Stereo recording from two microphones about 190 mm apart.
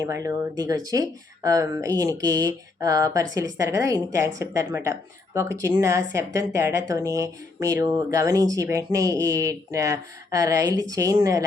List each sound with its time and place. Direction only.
0.0 s speech: 15° right (ahead or behind)